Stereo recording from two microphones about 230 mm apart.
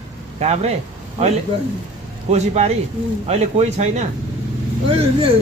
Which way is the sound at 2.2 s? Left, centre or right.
Right.